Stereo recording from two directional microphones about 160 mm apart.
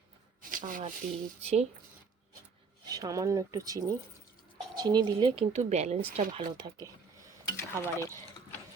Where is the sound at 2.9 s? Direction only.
20° right (ahead or behind); by 6.4 s 40° right (ahead or behind).